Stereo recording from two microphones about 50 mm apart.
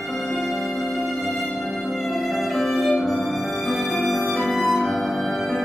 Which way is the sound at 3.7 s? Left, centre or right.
Centre.